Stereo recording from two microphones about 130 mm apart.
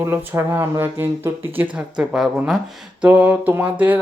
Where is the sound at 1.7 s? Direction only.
5° right (ahead or behind).